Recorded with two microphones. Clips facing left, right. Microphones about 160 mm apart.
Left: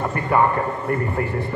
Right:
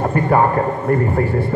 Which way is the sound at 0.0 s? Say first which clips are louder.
Right 4 dB; 35° right (ahead or behind).